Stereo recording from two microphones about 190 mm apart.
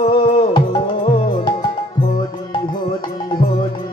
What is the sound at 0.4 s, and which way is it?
Music, 25° left (ahead or behind).